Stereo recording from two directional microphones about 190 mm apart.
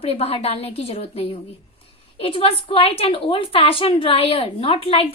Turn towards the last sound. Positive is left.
turn(degrees=30)  # may be behind; listen again after turning